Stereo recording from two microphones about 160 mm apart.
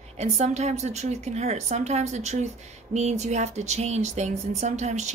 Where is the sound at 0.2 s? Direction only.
45° right (ahead or behind).